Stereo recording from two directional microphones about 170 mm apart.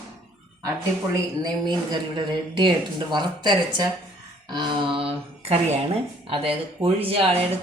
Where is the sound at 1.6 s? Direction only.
25° right (ahead or behind).